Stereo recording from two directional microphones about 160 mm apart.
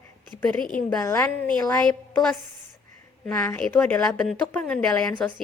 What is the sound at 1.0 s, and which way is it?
Speech, 15° left (ahead or behind).